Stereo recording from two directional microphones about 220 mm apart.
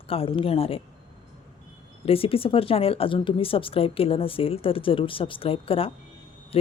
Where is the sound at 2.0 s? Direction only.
25° left (ahead or behind).